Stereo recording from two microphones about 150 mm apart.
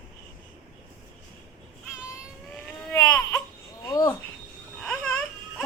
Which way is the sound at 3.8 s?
25° left (ahead or behind).